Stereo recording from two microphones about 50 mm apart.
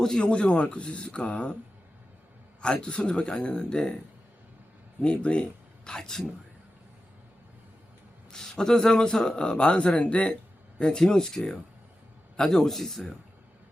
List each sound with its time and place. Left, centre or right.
0.0 s speech: centre
2.8 s speech: centre
5.0 s speech: left
8.3 s speech: centre